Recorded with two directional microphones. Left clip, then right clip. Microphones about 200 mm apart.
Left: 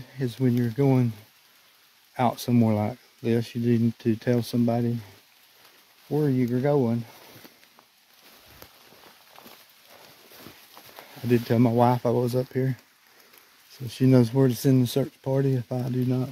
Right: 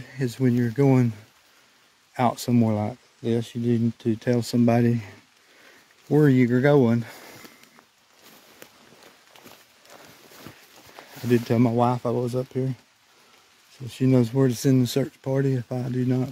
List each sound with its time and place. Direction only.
0.2 s speech: 10° right (ahead or behind)
2.1 s speech: 10° right (ahead or behind)
4.6 s speech: 35° right (ahead or behind)
6.0 s speech: 35° right (ahead or behind)
11.0 s speech: 5° right (ahead or behind)
11.7 s speech: 10° left (ahead or behind)
13.8 s speech: 5° left (ahead or behind)